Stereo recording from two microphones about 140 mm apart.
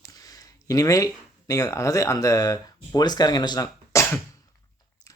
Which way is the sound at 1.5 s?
25° left (ahead or behind).